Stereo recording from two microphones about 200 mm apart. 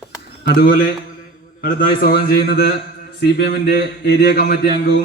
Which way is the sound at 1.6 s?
45° left (ahead or behind).